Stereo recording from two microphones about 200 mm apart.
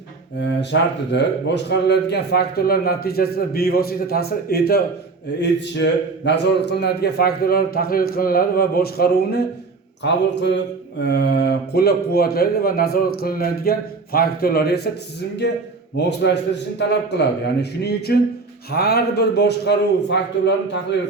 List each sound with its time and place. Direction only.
0.6 s a man's voice: 60° left (ahead or behind)